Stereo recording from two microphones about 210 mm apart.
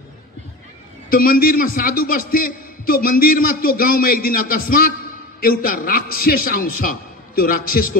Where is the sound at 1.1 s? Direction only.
45° left (ahead or behind).